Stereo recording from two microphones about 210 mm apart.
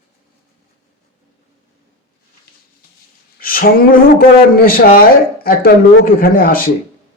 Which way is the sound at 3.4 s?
45° left (ahead or behind).